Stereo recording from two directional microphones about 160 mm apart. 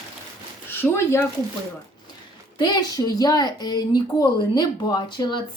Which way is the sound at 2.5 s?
25° left (ahead or behind).